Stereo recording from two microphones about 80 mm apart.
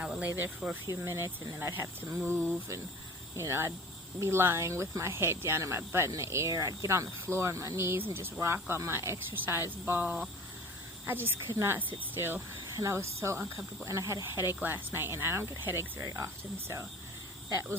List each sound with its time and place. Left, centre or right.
0.0 s snake: centre
0.6 s speech: centre
1.0 s speech: right
2.1 s speech: centre
3.3 s speech: right
12.7 s speech: right
14.3 s speech: right